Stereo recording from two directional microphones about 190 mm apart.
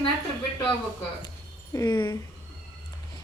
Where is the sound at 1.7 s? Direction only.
20° left (ahead or behind).